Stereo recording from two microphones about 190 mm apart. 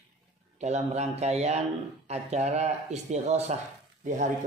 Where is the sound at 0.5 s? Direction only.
35° right (ahead or behind).